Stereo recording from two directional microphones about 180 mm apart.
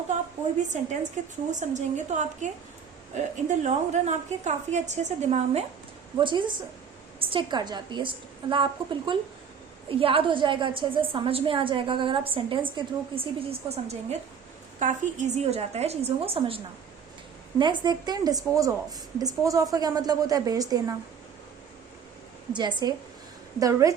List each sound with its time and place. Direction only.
0.7 s a woman's voice: 45° right (ahead or behind)
6.1 s a woman's voice: 25° right (ahead or behind)
17.6 s a woman's voice: 25° right (ahead or behind)
22.5 s a woman's voice: 25° right (ahead or behind)